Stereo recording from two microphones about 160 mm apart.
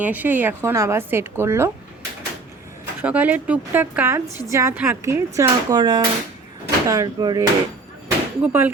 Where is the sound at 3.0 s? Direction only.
10° right (ahead or behind).